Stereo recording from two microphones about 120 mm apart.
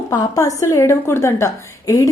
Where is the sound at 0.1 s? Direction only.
30° left (ahead or behind).